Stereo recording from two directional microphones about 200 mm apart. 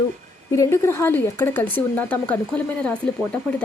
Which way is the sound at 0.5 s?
15° left (ahead or behind).